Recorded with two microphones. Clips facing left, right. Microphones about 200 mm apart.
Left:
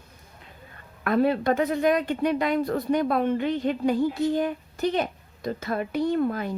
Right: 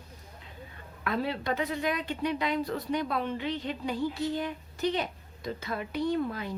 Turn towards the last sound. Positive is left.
turn(degrees=50)  # may be behind; listen again after turning